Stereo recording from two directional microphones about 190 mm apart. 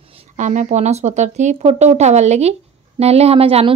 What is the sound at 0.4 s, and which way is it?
Speech, 40° right (ahead or behind).